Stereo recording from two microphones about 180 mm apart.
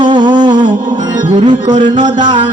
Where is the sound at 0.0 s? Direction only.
25° right (ahead or behind).